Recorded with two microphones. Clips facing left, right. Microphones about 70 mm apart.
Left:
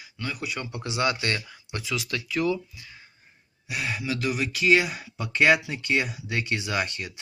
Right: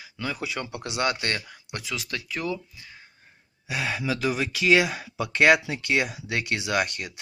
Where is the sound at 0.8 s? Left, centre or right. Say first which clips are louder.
Left 1 dB; right.